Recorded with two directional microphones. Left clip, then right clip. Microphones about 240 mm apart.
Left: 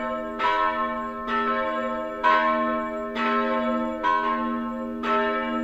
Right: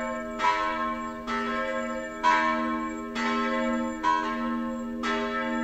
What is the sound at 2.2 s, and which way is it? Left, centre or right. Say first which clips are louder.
Church bell: left 3 dB; right.